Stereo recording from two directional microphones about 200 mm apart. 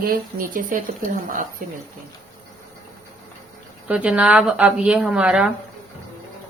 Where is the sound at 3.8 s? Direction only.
5° right (ahead or behind).